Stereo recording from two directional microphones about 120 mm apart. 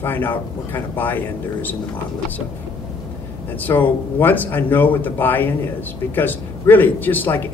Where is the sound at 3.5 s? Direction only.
15° left (ahead or behind).